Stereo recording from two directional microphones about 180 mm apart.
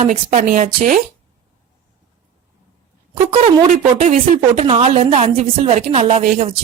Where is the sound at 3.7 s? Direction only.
40° right (ahead or behind).